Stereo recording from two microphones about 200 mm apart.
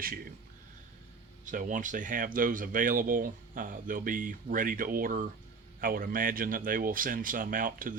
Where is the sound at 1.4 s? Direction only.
40° right (ahead or behind).